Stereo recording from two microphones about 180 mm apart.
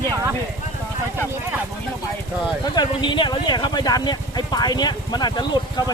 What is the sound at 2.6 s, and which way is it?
Speech, 25° left (ahead or behind).